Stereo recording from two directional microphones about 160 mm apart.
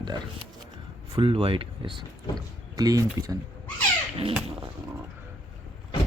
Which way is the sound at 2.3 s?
20° right (ahead or behind).